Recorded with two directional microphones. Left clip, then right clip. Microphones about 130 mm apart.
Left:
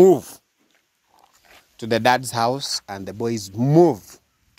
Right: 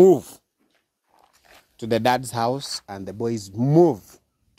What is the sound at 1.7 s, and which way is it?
Speech, 30° right (ahead or behind).